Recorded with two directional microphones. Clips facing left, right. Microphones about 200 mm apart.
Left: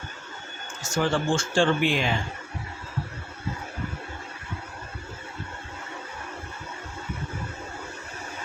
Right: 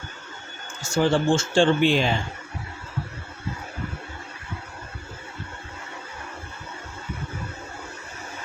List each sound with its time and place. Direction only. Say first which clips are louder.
0.8 s a man's voice: right 4 dB; 30° right (ahead or behind)